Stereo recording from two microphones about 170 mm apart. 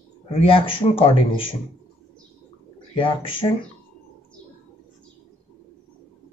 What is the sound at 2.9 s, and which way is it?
Speech, 30° left (ahead or behind).